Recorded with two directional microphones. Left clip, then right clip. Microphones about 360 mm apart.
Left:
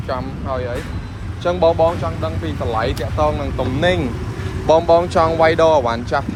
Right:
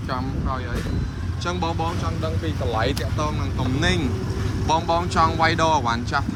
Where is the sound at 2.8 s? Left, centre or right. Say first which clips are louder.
Left 7 dB; centre.